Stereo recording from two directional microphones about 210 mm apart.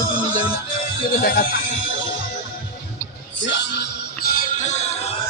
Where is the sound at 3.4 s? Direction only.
60° left (ahead or behind); by 5.1 s 35° left (ahead or behind).